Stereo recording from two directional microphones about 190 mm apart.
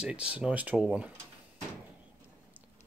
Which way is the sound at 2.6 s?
10° right (ahead or behind).